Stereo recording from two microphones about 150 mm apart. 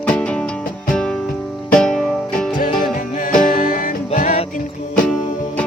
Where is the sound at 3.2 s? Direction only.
65° left (ahead or behind).